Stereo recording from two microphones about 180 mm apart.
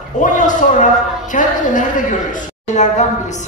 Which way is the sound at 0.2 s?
45° left (ahead or behind).